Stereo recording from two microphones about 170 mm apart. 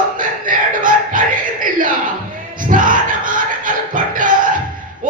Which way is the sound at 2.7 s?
50° right (ahead or behind).